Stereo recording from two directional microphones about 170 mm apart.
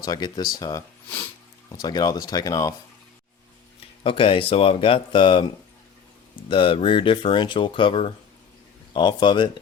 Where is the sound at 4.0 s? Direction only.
30° left (ahead or behind).